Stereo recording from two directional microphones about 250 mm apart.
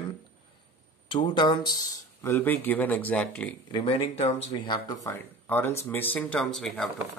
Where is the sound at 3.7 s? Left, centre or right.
Left; by 6.9 s centre.